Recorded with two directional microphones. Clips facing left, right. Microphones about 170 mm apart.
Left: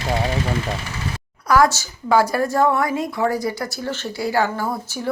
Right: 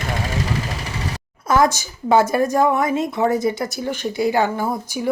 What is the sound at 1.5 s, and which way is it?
A woman's voice, 20° right (ahead or behind).